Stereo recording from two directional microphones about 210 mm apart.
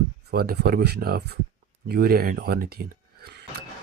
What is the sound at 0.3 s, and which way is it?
Speech, 50° right (ahead or behind).